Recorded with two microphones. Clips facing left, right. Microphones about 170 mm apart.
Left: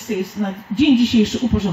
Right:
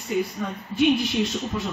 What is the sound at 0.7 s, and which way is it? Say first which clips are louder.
Speech: left 8 dB; 90° left.